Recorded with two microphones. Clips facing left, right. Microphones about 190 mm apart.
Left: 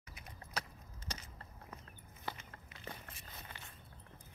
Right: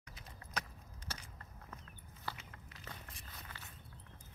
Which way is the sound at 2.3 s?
20° left (ahead or behind).